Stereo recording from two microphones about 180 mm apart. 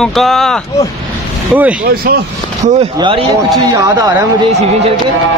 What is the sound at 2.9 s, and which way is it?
Speech, 25° right (ahead or behind).